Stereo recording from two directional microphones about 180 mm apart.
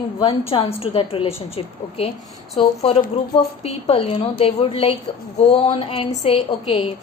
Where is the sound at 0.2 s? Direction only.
30° left (ahead or behind).